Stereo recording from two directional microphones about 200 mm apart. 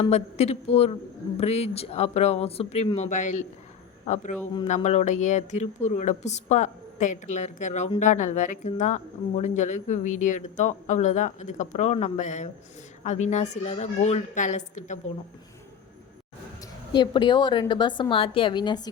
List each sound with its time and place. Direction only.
0.0 s a man's voice: 35° left (ahead or behind)
16.9 s a woman's voice: 20° left (ahead or behind)